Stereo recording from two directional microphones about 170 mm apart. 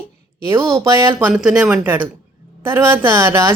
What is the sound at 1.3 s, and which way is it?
Speech, 5° right (ahead or behind).